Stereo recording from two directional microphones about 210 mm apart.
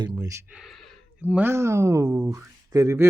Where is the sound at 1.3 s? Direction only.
10° right (ahead or behind).